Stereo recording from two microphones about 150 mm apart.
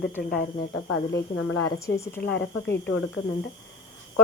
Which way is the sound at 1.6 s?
20° left (ahead or behind).